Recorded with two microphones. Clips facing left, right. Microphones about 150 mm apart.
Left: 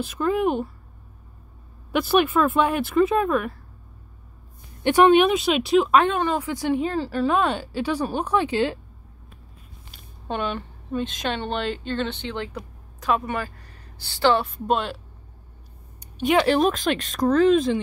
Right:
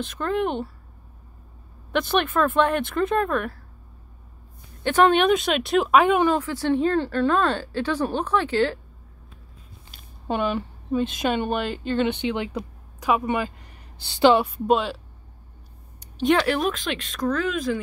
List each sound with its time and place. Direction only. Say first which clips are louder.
0.0 s speech: left 3 dB; 5° left (ahead or behind)
1.9 s speech: left 3 dB; 10° left (ahead or behind)
5.0 s speech: left 2 dB; 5° left (ahead or behind)
6.3 s speech: right 1 dB; 15° left (ahead or behind)
10.2 s a woman's voice: right 3 dB; 5° right (ahead or behind)
14.7 s speech: right 2 dB; centre (ahead or behind)
16.0 s a sound: right 2 dB; 5° left (ahead or behind)
16.4 s speech: left 4 dB; 30° left (ahead or behind)